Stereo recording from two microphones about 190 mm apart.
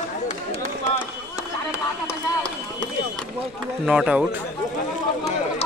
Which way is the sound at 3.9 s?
5° right (ahead or behind).